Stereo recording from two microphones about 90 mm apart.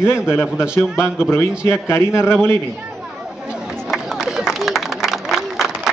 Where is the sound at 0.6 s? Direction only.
10° right (ahead or behind).